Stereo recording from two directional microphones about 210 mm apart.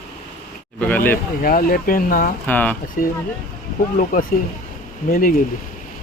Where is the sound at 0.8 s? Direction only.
10° left (ahead or behind).